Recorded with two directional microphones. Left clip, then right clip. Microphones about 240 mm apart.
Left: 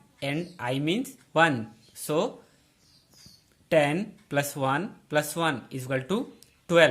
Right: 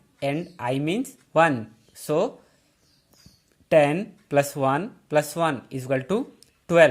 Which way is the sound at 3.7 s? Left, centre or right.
Right.